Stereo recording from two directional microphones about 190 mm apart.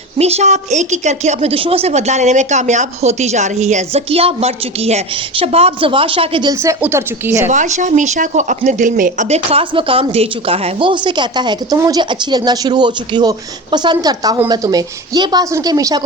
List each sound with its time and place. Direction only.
0.2 s a woman's voice: 35° right (ahead or behind); by 7.5 s 15° right (ahead or behind)
7.5 s speech: 40° right (ahead or behind); by 16.0 s 20° right (ahead or behind)